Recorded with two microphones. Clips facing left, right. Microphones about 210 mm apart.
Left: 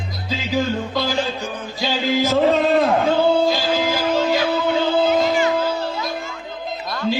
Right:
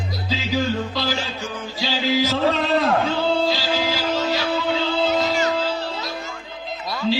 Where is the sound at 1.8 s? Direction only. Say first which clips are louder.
Left 2 dB; 50° left (ahead or behind).